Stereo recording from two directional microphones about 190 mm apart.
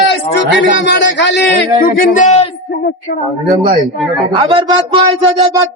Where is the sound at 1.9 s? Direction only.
45° left (ahead or behind).